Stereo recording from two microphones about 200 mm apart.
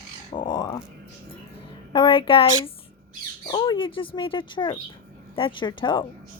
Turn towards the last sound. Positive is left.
turn(degrees=25)  # may be behind; listen again after turning